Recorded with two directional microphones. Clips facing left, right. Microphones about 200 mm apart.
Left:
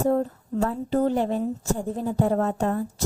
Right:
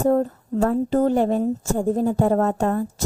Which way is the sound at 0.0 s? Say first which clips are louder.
Right 3 dB; 50° right (ahead or behind).